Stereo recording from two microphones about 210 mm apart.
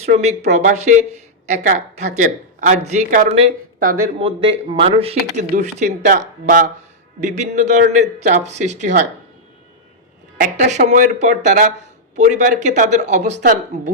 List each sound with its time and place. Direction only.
0.0 s speech: 30° right (ahead or behind)
3.8 s speech: 40° right (ahead or behind)
4.2 s speech: 25° right (ahead or behind)
10.4 s speech: 35° right (ahead or behind)